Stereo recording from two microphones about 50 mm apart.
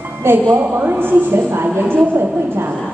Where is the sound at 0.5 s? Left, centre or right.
Right.